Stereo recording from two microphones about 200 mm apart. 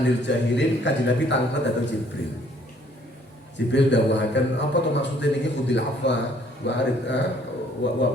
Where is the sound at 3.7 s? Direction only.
60° left (ahead or behind).